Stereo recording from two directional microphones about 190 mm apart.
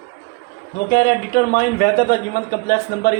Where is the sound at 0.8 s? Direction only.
55° left (ahead or behind).